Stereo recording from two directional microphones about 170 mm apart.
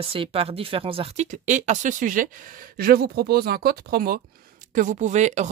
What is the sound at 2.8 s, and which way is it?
Speech, 65° right (ahead or behind).